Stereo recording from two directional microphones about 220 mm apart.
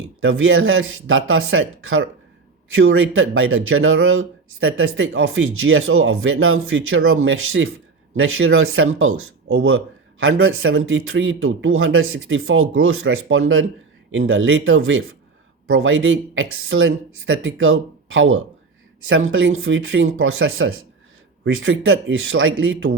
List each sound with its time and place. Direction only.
0.2 s speech: 65° right (ahead or behind)